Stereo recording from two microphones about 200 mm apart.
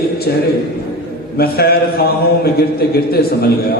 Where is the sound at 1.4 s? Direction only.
50° left (ahead or behind).